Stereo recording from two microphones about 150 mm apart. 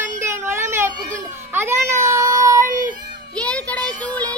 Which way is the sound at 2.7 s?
60° right (ahead or behind).